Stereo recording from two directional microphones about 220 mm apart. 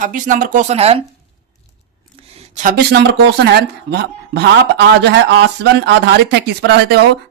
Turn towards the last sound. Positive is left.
turn(degrees=-50)  # may be behind; listen again after turning